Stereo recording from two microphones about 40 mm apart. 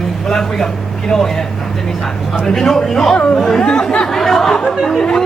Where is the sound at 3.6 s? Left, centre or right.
Centre.